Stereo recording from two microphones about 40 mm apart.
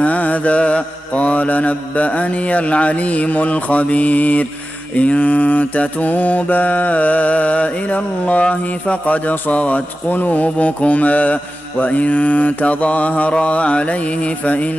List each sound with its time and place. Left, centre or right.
0.0 s mantra: left